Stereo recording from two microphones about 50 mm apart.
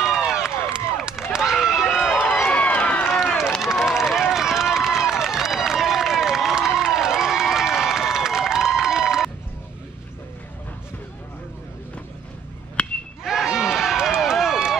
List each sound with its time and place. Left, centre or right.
0.0 s run: centre
1.3 s a sound: centre
2.1 s run: left
3.2 s run: centre
12.8 s a sound: left
13.2 s run: centre